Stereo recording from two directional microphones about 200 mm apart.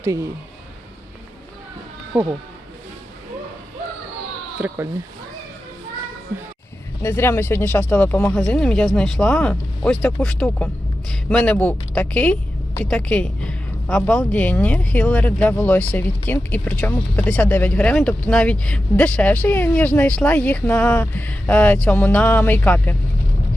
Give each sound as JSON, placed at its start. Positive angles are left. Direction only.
{"t": 0.0, "sound": "speech", "side_deg": -15}
{"t": 2.1, "sound": "speech", "side_deg": -5}
{"t": 4.6, "sound": "speech", "side_deg": -5}
{"t": 7.0, "sound": "speech", "side_deg": 10}